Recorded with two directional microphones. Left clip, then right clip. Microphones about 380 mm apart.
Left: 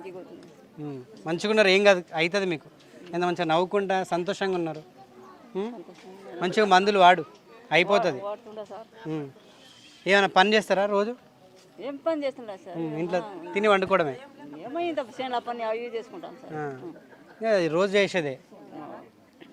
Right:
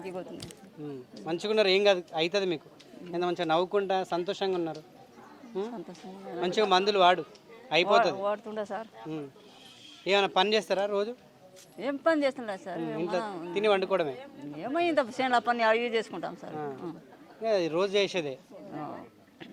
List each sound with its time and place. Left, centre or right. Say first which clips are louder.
0.9 s a man's voice: left 3 dB; left
8.2 s speech: right 4 dB; right
10.0 s speech: left 5 dB; left
11.8 s speech: right 2 dB; right
13.0 s speech: left 3 dB; left
14.6 s speech: right 2 dB; right
17.4 s speech: left 4 dB; left